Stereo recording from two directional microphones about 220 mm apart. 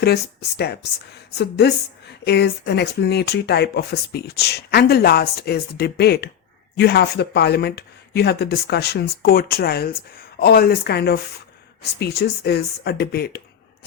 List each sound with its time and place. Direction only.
0.0 s speech: 50° left (ahead or behind)